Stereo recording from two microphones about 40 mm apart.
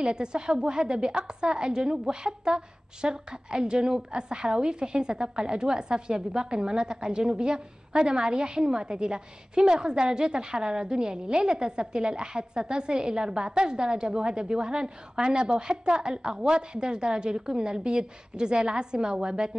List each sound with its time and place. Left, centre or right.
0.0 s a woman's voice: right